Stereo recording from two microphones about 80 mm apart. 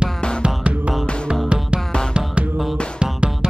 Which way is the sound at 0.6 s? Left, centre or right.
Centre.